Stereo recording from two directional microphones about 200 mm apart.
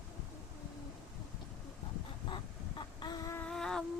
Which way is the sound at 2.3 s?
25° left (ahead or behind).